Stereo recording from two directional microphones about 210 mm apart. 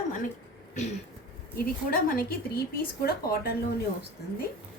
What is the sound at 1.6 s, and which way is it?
Speech, 45° left (ahead or behind).